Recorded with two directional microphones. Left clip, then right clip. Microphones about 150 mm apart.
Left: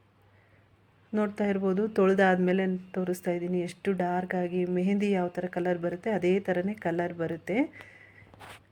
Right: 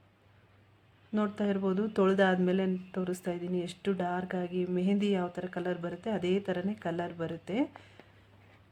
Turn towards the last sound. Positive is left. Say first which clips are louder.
# left 4 dB
turn(degrees=10)  # may be behind; listen again after turning